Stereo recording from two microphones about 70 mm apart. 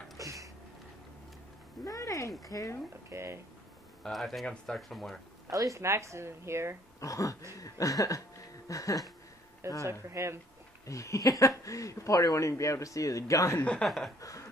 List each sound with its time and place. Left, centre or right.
0.2 s a sound: right
1.9 s speech: left
3.1 s speech: right
4.0 s speech: centre
5.5 s speech: right
7.0 s speech: left
7.5 s a sound: left
9.8 s speech: right
10.9 s speech: left
13.6 s speech: centre
13.8 s speech: centre